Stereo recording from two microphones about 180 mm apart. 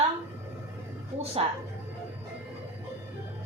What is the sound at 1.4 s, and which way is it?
Speech, 30° right (ahead or behind).